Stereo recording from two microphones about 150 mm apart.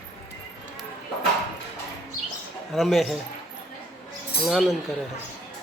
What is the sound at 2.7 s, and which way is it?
Speech, centre (ahead or behind).